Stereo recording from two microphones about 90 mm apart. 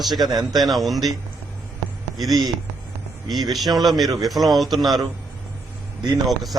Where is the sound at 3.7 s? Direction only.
Centre (ahead or behind).